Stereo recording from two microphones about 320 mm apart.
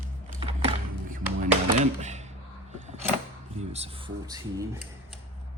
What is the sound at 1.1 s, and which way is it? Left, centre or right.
Music, right.